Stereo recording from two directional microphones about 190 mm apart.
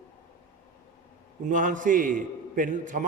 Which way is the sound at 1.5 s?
45° right (ahead or behind).